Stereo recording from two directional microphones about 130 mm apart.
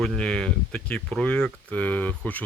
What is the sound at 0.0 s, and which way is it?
Speech, 5° left (ahead or behind).